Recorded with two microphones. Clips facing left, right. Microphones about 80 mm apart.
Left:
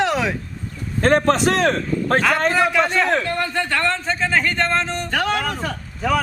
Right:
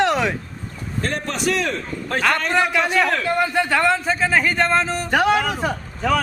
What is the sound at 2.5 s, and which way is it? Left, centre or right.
Speech, centre.